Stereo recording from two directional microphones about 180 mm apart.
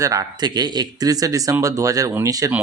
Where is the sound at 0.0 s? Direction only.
20° right (ahead or behind).